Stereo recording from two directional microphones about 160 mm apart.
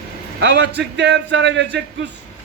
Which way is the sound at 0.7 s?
90° right.